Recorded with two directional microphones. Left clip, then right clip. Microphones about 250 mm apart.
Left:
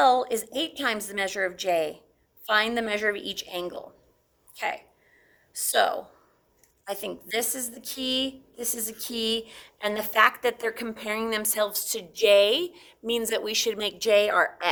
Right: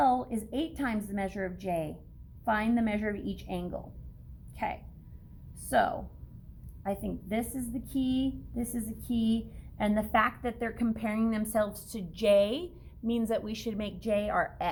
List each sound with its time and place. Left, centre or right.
0.0 s a woman's voice: left
6.8 s a woman's voice: left